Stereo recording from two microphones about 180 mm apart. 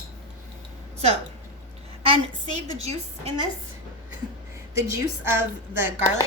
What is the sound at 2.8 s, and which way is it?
Speech, 35° right (ahead or behind).